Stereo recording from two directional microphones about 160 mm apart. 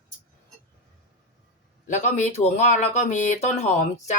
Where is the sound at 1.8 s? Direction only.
50° left (ahead or behind).